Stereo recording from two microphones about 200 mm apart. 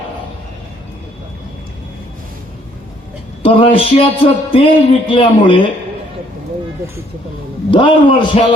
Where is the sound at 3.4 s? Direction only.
25° left (ahead or behind).